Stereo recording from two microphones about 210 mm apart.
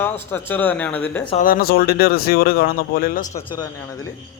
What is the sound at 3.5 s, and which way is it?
Speech, 20° left (ahead or behind).